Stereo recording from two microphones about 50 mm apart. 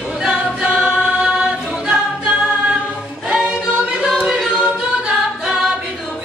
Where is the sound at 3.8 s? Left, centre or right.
Centre.